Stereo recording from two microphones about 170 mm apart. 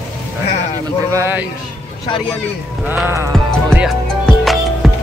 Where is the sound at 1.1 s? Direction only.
15° right (ahead or behind).